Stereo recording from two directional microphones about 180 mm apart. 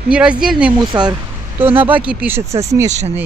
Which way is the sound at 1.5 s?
10° right (ahead or behind).